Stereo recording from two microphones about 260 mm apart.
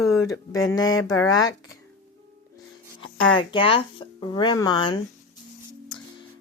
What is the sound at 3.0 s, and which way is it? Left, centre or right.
Music, left.